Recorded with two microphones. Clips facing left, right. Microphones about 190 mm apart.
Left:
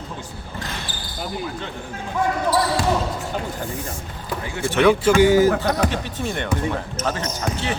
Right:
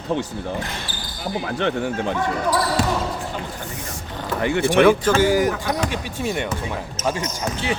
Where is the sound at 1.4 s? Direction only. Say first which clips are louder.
Right 8 dB; 75° right (ahead or behind).